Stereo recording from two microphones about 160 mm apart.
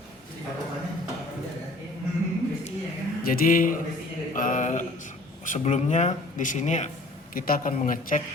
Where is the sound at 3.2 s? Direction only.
60° left (ahead or behind).